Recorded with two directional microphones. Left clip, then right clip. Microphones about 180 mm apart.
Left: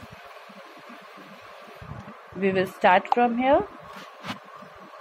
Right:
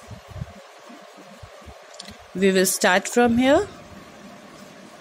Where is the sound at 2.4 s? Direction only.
65° right (ahead or behind).